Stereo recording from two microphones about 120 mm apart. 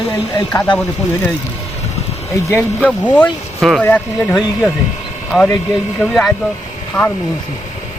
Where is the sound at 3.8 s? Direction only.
15° left (ahead or behind).